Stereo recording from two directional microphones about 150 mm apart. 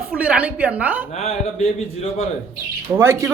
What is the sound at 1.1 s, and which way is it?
Speech, 45° left (ahead or behind).